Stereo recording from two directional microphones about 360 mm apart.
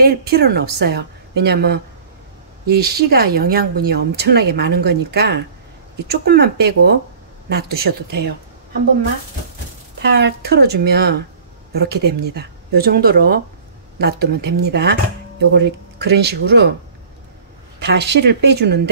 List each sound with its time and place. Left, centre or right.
0.0 s speech: right
10.0 s speech: right
17.8 s speech: right